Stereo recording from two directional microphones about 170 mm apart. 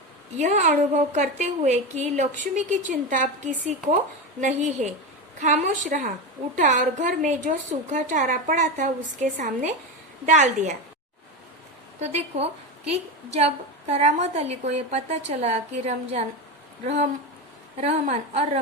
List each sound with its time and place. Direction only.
0.3 s a woman's voice: 45° right (ahead or behind)
11.9 s a woman's voice: 40° right (ahead or behind)